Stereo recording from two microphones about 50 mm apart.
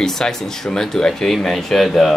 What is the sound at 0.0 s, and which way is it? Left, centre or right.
Speech, centre.